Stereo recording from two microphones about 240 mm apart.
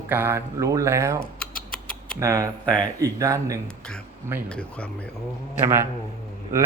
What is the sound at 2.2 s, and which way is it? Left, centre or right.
Speech, centre.